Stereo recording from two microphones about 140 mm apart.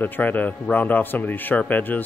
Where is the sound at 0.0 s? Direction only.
10° left (ahead or behind).